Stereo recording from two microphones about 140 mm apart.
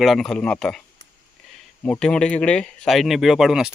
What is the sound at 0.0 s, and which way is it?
Speech, centre (ahead or behind).